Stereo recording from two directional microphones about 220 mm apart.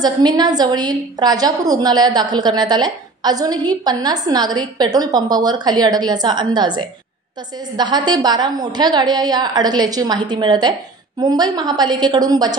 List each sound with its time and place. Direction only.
0.0 s a woman's voice: 20° right (ahead or behind)